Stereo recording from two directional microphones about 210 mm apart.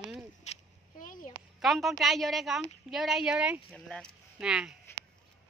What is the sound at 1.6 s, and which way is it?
A woman's voice, centre (ahead or behind).